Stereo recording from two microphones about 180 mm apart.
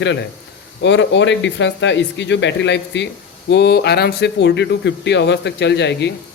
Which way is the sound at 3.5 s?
65° left (ahead or behind).